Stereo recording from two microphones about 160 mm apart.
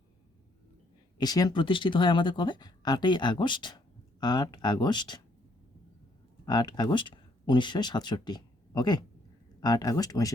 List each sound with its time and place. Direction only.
1.2 s speech: 25° left (ahead or behind)
6.4 s speech: 25° left (ahead or behind)